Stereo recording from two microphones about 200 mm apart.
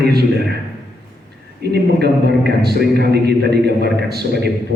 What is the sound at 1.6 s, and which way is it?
A man's voice, 55° right (ahead or behind).